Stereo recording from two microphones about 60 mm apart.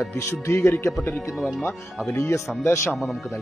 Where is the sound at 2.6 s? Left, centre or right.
Left.